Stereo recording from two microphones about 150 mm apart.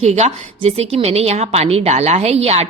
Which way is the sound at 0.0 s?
45° right (ahead or behind).